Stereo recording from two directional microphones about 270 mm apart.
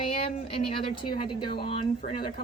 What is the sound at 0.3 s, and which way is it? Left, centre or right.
A woman's voice, centre.